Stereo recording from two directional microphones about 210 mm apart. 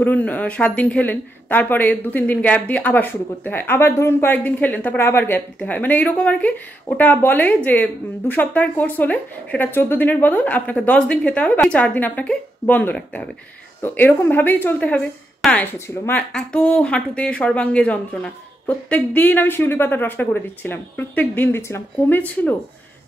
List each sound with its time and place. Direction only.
0.0 s speech: 10° left (ahead or behind)